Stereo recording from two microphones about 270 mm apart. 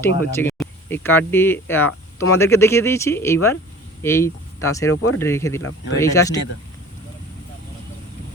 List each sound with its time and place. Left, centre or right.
0.2 s speech: centre